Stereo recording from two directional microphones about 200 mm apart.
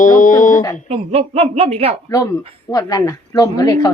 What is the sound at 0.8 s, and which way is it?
A woman's voice, 30° right (ahead or behind).